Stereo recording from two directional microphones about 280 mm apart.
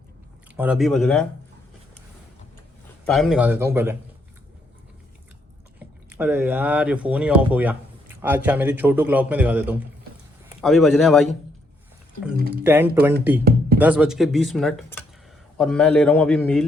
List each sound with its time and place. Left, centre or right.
0.5 s speech: centre
3.1 s speech: centre
6.1 s speech: centre
12.4 s speech: right
12.6 s speech: centre